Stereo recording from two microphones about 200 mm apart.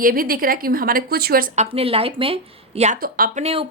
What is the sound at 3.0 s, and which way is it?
Speech, 45° right (ahead or behind).